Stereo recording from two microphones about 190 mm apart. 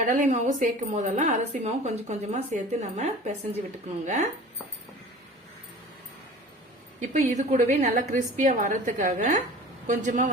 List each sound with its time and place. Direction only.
0.0 s a woman's voice: 40° right (ahead or behind)
7.1 s a woman's voice: 35° right (ahead or behind)